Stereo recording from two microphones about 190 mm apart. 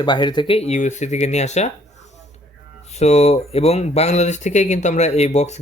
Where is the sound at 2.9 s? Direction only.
35° left (ahead or behind).